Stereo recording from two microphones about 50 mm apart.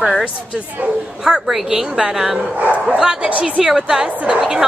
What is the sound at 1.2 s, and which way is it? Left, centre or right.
Speech, centre.